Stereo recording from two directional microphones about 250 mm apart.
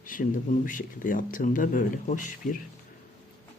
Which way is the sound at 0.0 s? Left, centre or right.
Left.